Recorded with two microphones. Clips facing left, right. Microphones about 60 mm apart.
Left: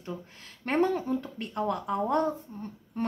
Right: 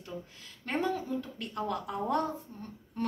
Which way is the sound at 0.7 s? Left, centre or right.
Left.